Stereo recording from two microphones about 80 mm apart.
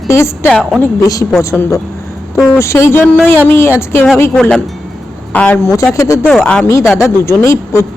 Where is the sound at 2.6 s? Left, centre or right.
Left.